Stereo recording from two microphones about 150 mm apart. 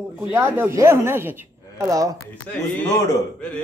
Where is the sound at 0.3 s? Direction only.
15° right (ahead or behind).